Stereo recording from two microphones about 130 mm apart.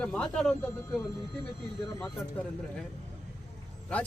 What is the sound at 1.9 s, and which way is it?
Speech, 10° left (ahead or behind).